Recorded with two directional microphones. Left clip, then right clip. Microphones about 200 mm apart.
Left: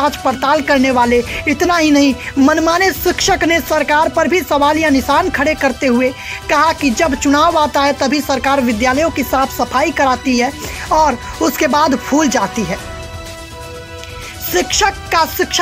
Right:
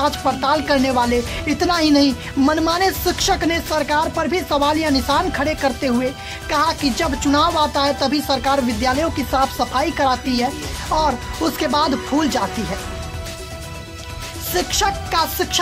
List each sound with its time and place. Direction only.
0.0 s speech: 20° left (ahead or behind)
14.8 s speech: 20° left (ahead or behind)